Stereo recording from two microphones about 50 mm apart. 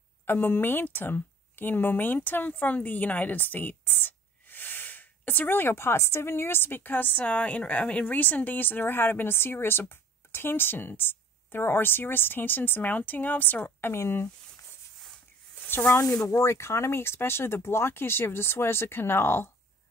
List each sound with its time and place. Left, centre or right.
0.2 s speech: left
13.9 s speech: left
15.6 s a sound: left
15.9 s speech: left